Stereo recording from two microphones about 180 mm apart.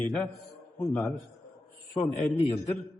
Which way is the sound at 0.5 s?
15° left (ahead or behind).